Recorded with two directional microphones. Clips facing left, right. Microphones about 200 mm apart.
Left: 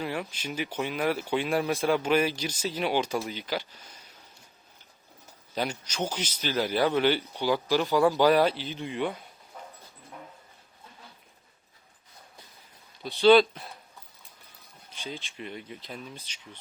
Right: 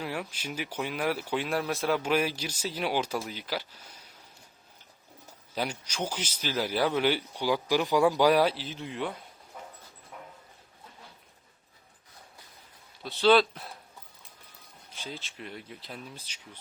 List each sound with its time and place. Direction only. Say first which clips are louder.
0.0 s speech: left 2 dB; 5° right (ahead or behind)
5.5 s speech: left 2 dB; 10° right (ahead or behind)
13.0 s speech: left 4 dB; centre (ahead or behind)
14.9 s speech: left 2 dB; 5° right (ahead or behind)